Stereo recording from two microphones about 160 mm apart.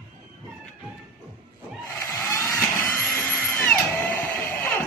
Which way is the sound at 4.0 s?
10° left (ahead or behind).